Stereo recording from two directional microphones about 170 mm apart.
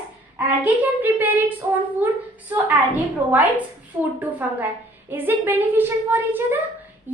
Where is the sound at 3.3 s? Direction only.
10° right (ahead or behind).